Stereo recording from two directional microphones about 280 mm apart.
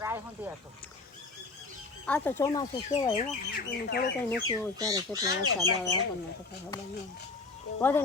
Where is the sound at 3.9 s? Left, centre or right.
Left.